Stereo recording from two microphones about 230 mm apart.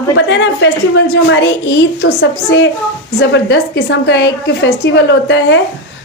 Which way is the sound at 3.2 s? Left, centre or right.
Left.